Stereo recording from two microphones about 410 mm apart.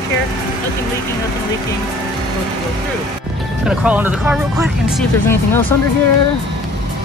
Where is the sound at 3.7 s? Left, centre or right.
Centre.